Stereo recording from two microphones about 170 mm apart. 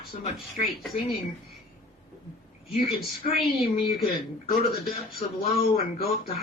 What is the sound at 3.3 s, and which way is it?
A woman's voice, 65° left (ahead or behind).